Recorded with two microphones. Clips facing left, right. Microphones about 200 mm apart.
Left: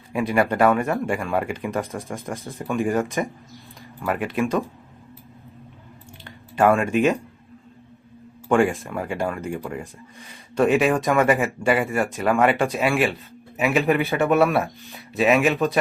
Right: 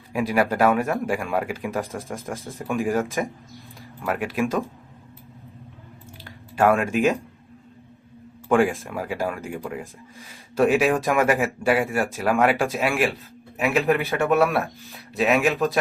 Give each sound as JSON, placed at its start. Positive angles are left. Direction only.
{"t": 0.1, "sound": "speech", "side_deg": 0}
{"t": 6.2, "sound": "speech", "side_deg": 0}
{"t": 8.4, "sound": "speech", "side_deg": 0}